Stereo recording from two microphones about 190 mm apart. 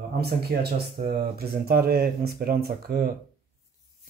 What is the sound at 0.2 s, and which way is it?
Speech, 55° right (ahead or behind).